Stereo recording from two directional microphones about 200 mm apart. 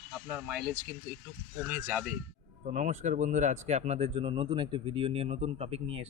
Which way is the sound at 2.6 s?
40° right (ahead or behind).